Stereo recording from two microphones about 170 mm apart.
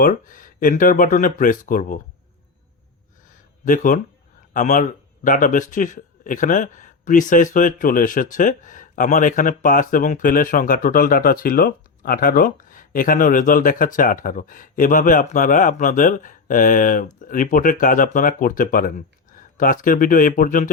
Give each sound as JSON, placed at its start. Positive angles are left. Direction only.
{"t": 0.0, "sound": "a man's voice", "side_deg": 55}
{"t": 3.7, "sound": "a man's voice", "side_deg": 50}